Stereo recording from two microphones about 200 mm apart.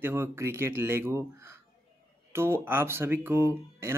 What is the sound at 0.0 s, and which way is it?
Speech, 10° right (ahead or behind).